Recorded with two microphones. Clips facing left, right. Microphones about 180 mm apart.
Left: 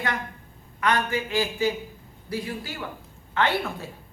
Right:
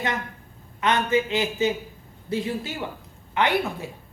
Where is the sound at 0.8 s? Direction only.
20° right (ahead or behind).